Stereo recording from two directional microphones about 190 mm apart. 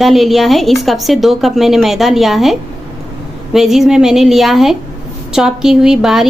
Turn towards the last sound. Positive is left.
turn(degrees=0)  # may be behind; listen again after turning